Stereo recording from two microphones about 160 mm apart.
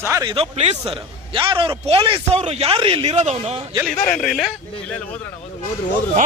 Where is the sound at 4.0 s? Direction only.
50° left (ahead or behind).